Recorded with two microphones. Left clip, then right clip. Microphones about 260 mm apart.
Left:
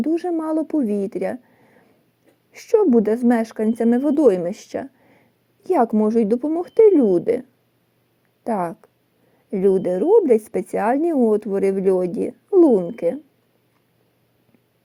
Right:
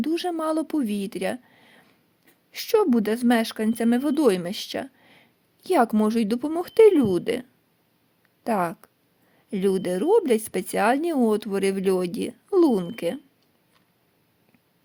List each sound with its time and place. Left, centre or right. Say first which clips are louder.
0.0 s a woman's voice: left 3 dB; right
8.4 s a woman's voice: left 1 dB; right